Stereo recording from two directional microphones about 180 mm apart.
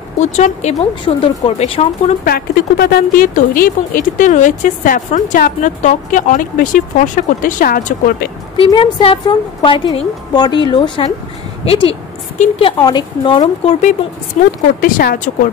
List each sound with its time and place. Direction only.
0.2 s speech: 40° left (ahead or behind)
2.2 s speech: 60° left (ahead or behind)
8.5 s a woman's voice: 30° left (ahead or behind)
14.3 s speech: 40° left (ahead or behind)
14.8 s speech: 50° left (ahead or behind)